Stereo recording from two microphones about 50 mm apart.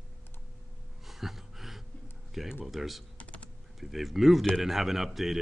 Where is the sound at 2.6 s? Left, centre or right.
Centre.